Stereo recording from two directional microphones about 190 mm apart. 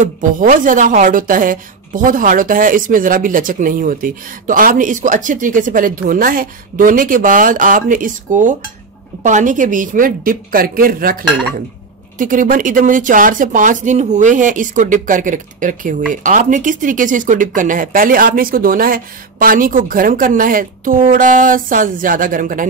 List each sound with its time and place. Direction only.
0.0 s speech: 45° right (ahead or behind)
12.2 s speech: 45° right (ahead or behind)